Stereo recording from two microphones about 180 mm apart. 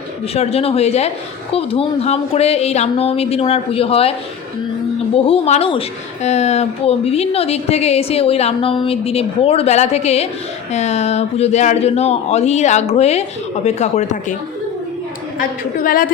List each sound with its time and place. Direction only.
0.3 s speech: 35° left (ahead or behind)
5.1 s speech: 30° left (ahead or behind)
15.4 s a woman's voice: 50° left (ahead or behind)